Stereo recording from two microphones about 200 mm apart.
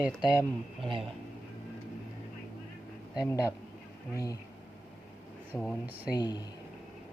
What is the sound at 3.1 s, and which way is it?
Speech, 15° left (ahead or behind).